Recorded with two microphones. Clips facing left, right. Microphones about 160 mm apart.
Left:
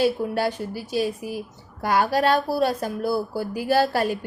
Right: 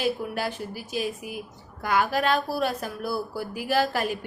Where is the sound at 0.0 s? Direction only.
30° left (ahead or behind).